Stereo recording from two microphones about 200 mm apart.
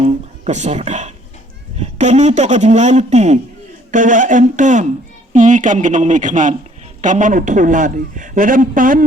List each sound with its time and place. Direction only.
0.0 s speech: 35° right (ahead or behind)